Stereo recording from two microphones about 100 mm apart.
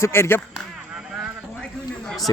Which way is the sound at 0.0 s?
25° left (ahead or behind).